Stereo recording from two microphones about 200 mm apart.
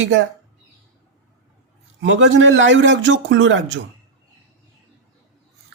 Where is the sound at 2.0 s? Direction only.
70° right (ahead or behind).